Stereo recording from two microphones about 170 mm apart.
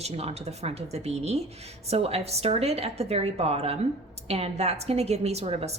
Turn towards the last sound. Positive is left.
turn(degrees=-40)  # may be behind; listen again after turning